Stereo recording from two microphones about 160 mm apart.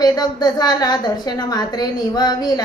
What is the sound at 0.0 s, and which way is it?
A woman's voice, 25° left (ahead or behind).